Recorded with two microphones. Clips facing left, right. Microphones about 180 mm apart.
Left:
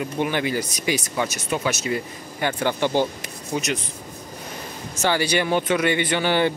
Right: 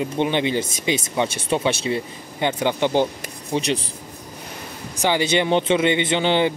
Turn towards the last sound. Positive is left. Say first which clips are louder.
# right 2 dB
turn(degrees=-20)  # may be behind; listen again after turning